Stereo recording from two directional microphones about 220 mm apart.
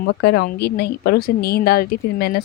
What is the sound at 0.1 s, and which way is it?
Speech, 50° left (ahead or behind).